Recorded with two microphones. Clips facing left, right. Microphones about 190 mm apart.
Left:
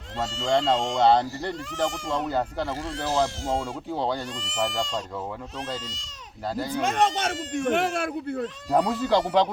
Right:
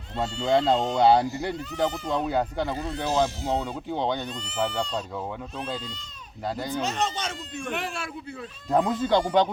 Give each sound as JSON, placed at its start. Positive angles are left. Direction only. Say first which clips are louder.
{"t": 0.3, "sound": "speech", "louder": "right 1 dB", "side_deg": 85}
{"t": 1.0, "sound": "speech", "louder": "even", "side_deg": -5}
{"t": 4.4, "sound": "speech", "louder": "even", "side_deg": 90}
{"t": 6.8, "sound": "speech", "louder": "left 8 dB", "side_deg": 50}
{"t": 8.7, "sound": "speech", "louder": "even", "side_deg": 5}